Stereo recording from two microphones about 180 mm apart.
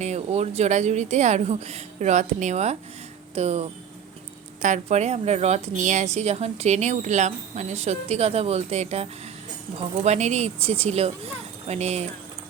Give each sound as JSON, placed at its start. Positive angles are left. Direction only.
{"t": 0.0, "sound": "a woman's voice", "side_deg": -40}